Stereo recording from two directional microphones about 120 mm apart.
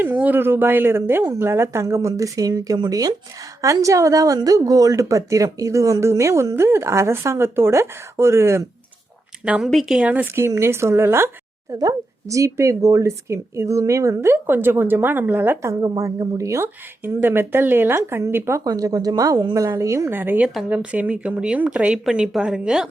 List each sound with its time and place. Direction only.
0.0 s a woman's voice: 15° right (ahead or behind)
9.4 s speech: 10° right (ahead or behind)
9.6 s a woman's voice: centre (ahead or behind)
10.0 s a woman's voice: 15° right (ahead or behind)
18.6 s a woman's voice: 30° right (ahead or behind); by 22.9 s 5° right (ahead or behind)